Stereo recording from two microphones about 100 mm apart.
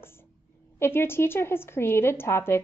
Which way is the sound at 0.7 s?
25° left (ahead or behind).